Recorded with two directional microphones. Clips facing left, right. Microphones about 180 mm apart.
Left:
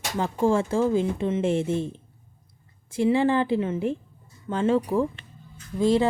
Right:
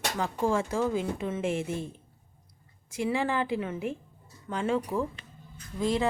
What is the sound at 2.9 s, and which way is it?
A woman's voice, 30° left (ahead or behind).